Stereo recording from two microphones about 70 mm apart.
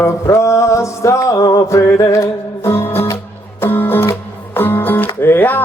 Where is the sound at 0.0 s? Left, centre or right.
Left.